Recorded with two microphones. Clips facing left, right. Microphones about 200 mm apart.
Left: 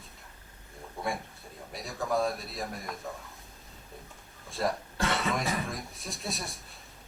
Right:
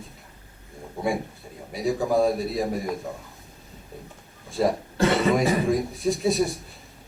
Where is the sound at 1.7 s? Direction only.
Centre (ahead or behind).